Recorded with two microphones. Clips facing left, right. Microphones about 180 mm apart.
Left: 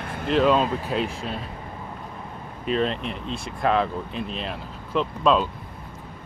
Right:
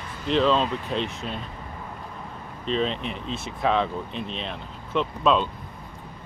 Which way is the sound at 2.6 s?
5° left (ahead or behind).